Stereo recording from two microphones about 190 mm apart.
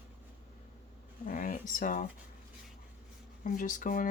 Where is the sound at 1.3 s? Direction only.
45° left (ahead or behind).